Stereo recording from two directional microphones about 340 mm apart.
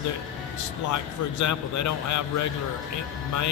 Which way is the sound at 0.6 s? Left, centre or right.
Left.